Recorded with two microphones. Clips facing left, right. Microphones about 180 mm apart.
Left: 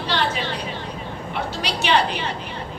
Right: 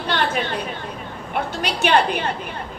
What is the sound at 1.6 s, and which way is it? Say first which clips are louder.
Speech: right 2 dB; 50° right (ahead or behind).